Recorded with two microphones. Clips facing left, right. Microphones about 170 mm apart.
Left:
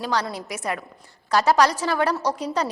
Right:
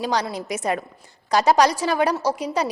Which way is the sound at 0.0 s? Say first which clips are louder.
Right 2 dB; 15° right (ahead or behind).